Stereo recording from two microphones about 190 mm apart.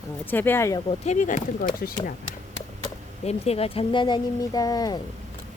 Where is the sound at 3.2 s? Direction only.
35° left (ahead or behind).